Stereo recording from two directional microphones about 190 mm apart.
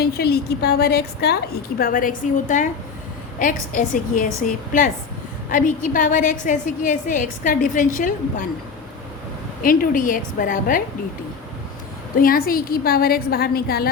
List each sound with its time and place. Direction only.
0.0 s a woman's voice: 55° left (ahead or behind)
1.8 s a woman's voice: 45° left (ahead or behind)
9.6 s a woman's voice: 45° left (ahead or behind)
12.1 s a woman's voice: 50° left (ahead or behind)